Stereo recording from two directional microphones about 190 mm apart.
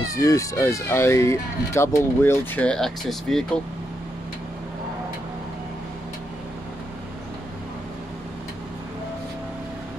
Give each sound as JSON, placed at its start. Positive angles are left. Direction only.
{"t": 0.1, "sound": "speech", "side_deg": 15}